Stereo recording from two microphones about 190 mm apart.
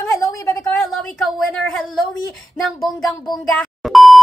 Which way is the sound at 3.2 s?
Centre (ahead or behind).